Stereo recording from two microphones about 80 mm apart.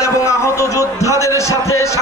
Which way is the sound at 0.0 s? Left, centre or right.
Left.